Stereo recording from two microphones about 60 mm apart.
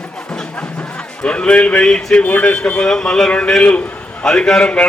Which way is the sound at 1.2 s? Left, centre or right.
Centre.